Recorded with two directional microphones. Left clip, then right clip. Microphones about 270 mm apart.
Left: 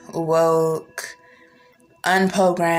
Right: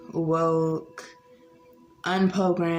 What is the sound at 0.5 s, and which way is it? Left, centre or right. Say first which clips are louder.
Speech: left 6 dB; left.